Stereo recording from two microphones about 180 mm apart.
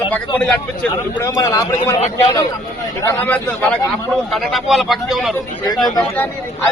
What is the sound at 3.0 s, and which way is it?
A man's voice, 10° left (ahead or behind).